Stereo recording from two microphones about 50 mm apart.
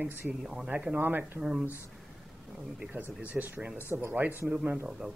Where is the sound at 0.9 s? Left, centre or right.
Right.